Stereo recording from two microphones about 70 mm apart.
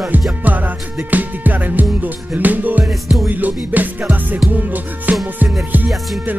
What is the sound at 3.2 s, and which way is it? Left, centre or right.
Music, right.